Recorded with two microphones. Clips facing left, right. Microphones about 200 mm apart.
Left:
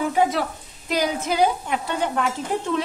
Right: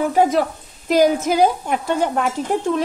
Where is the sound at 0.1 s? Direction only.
45° right (ahead or behind).